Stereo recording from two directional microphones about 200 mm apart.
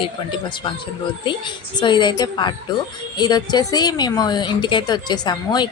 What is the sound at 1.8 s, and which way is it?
A woman's voice, 25° left (ahead or behind).